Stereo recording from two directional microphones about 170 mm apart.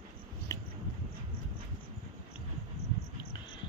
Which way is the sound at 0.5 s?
20° left (ahead or behind).